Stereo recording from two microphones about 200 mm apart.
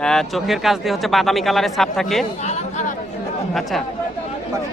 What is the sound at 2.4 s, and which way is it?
Chatter, 35° left (ahead or behind).